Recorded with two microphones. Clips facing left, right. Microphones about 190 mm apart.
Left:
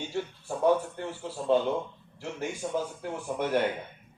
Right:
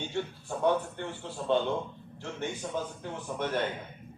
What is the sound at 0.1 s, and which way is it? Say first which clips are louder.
Speech: left 1 dB; 5° left (ahead or behind).